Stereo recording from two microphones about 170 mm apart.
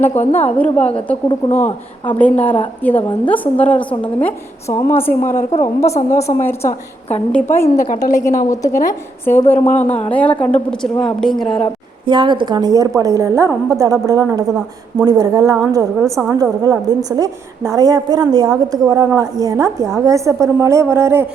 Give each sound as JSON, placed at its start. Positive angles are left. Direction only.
{"t": 0.1, "sound": "a woman's voice", "side_deg": 40}
{"t": 2.0, "sound": "a woman's voice", "side_deg": 10}
{"t": 12.0, "sound": "a woman's voice", "side_deg": -30}
{"t": 16.0, "sound": "a woman's voice", "side_deg": 0}
{"t": 16.3, "sound": "a woman's voice", "side_deg": -20}